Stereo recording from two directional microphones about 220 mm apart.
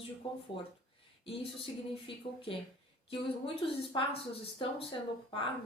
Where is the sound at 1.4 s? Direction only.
25° left (ahead or behind).